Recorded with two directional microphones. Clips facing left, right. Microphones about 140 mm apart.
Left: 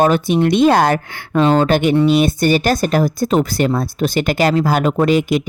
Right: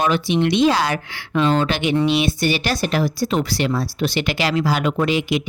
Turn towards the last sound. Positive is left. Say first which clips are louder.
# left 5 dB
turn(degrees=45)  # may be behind; listen again after turning